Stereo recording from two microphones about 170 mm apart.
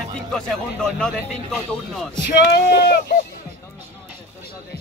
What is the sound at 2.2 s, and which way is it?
Speech, 75° left (ahead or behind).